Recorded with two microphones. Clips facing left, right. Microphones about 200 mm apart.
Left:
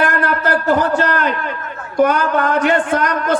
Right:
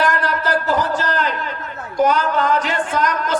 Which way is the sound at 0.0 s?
55° left (ahead or behind).